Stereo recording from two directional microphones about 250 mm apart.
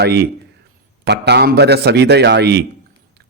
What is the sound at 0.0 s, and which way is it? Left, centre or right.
A man's voice, right.